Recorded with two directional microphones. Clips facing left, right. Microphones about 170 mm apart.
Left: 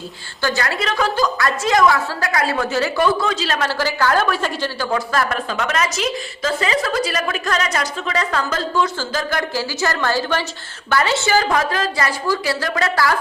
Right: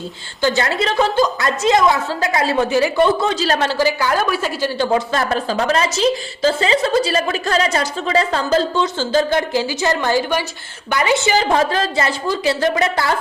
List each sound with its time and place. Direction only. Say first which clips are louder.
0.4 s a woman's voice: right 4 dB; 25° right (ahead or behind)
3.4 s a woman's voice: right 4 dB; 35° right (ahead or behind)
3.7 s a woman's voice: right 2 dB; 15° right (ahead or behind)
4.8 s a woman's voice: right 3 dB; 25° right (ahead or behind)